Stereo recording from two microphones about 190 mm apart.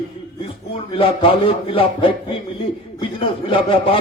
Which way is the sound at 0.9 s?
30° left (ahead or behind).